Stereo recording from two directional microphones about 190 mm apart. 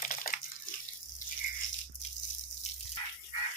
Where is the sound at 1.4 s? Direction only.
45° left (ahead or behind).